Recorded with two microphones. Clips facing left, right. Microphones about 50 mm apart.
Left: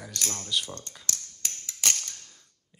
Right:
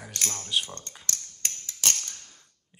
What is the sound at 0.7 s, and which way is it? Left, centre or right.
Speech, right.